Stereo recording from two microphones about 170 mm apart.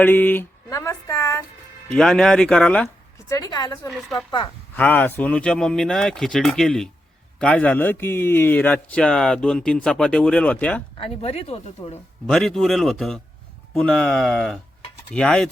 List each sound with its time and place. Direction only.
0.0 s a sound: 10° left (ahead or behind)
2.0 s speech: centre (ahead or behind)
3.2 s a woman's voice: 20° left (ahead or behind)
3.8 s a man's voice: centre (ahead or behind)
10.9 s speech: 35° left (ahead or behind)
12.2 s speech: 5° left (ahead or behind)